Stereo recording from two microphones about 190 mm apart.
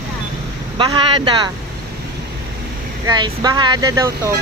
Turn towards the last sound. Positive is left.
turn(degrees=-15)  # may be behind; listen again after turning